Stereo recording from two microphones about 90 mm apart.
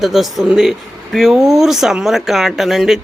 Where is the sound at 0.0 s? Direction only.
Centre (ahead or behind).